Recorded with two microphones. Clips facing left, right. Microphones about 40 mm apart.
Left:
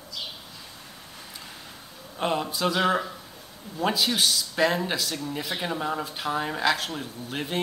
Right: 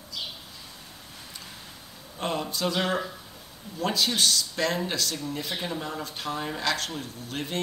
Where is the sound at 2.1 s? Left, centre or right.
Centre.